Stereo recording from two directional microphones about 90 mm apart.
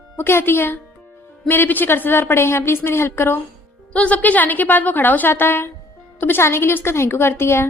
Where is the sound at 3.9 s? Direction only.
15° left (ahead or behind).